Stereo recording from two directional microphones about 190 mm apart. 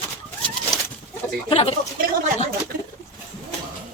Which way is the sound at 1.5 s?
30° left (ahead or behind).